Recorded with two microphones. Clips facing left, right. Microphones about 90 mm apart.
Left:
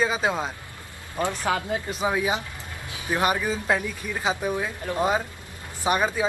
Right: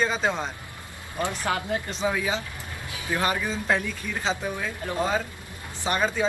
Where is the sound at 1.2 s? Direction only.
20° left (ahead or behind).